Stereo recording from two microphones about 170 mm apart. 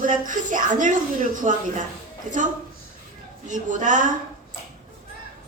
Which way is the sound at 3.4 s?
50° right (ahead or behind).